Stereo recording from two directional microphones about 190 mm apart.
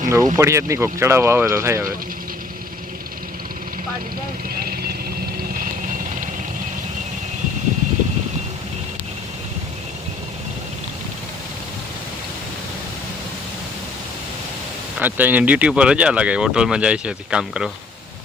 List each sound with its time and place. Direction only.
0.0 s speech: 15° right (ahead or behind)
14.9 s speech: 10° right (ahead or behind)